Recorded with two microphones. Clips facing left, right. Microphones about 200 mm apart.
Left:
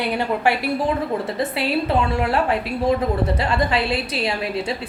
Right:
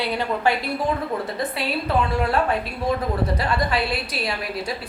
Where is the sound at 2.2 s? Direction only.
25° left (ahead or behind).